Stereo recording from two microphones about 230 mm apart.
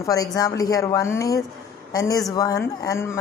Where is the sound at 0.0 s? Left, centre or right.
Centre.